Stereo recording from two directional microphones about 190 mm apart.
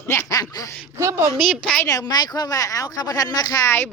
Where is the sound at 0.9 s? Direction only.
15° right (ahead or behind).